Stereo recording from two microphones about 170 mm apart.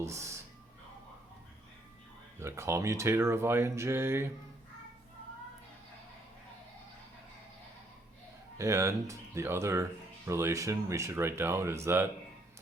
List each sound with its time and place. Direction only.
0.0 s speech: 15° right (ahead or behind)
2.4 s speech: 15° right (ahead or behind)
8.5 s speech: 20° right (ahead or behind)